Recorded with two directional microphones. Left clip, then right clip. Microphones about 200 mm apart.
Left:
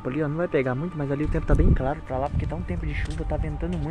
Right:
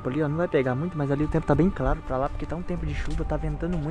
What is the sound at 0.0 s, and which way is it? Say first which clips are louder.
Speech: even; 10° right (ahead or behind).